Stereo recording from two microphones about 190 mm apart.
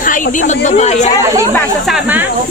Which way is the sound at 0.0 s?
45° left (ahead or behind).